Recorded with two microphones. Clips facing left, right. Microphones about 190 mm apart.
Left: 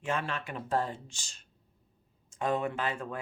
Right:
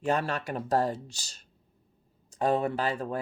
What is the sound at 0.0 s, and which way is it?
Speech, 40° right (ahead or behind).